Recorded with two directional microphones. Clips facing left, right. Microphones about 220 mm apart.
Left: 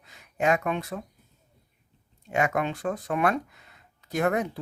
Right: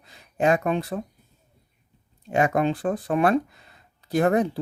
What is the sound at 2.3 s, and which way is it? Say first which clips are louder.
Speech: right 5 dB; 35° right (ahead or behind).